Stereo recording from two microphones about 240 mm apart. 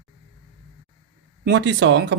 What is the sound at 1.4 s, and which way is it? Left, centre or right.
Speech, right.